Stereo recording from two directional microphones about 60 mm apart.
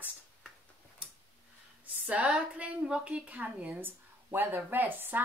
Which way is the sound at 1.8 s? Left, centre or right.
Right.